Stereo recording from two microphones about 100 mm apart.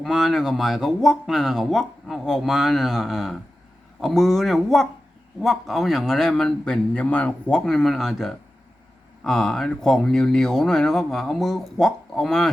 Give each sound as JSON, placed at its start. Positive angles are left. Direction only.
{"t": 0.0, "sound": "speech", "side_deg": 0}